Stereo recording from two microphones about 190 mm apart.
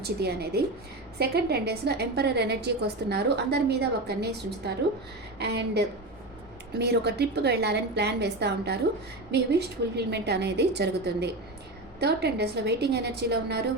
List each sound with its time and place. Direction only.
0.0 s a woman's voice: 60° right (ahead or behind)